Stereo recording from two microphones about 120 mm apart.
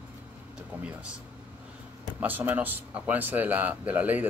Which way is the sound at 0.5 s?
10° right (ahead or behind).